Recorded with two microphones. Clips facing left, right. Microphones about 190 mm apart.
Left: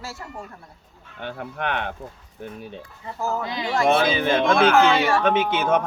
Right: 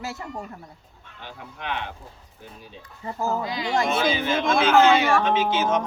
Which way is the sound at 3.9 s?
55° left (ahead or behind).